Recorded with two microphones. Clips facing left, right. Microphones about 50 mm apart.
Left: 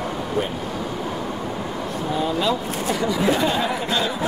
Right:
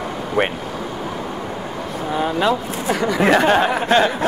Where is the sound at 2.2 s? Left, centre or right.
Right.